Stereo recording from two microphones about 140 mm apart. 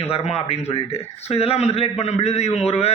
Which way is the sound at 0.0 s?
45° left (ahead or behind).